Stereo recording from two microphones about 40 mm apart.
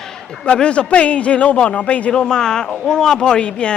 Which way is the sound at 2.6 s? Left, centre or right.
Centre.